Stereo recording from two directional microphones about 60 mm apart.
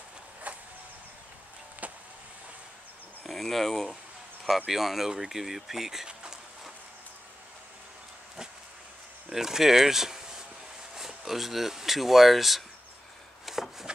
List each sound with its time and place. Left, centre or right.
0.5 s vehicle: right
1.8 s vehicle: right
3.3 s speech: centre
9.3 s speech: centre
13.5 s a sound: centre